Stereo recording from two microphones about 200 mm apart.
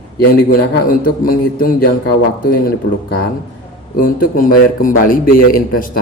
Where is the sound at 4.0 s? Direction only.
45° left (ahead or behind).